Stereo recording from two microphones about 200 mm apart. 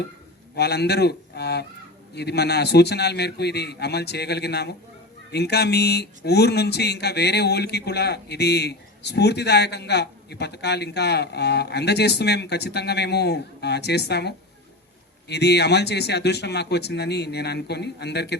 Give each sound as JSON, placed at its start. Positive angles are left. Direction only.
{"t": 0.5, "sound": "speech", "side_deg": 55}